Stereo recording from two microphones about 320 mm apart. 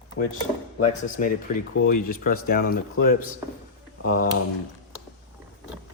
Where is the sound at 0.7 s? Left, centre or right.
Left.